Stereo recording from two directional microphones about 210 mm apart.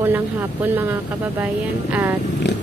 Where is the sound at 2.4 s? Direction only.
55° left (ahead or behind).